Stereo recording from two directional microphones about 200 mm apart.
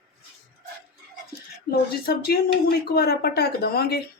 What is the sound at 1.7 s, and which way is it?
Speech, 50° left (ahead or behind).